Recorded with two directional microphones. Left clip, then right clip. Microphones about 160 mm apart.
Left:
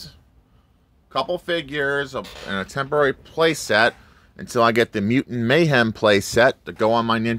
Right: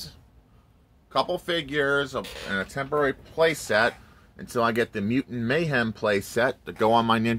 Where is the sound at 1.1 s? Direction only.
30° left (ahead or behind).